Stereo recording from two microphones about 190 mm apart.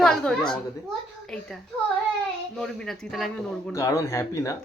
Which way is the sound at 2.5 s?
Centre (ahead or behind).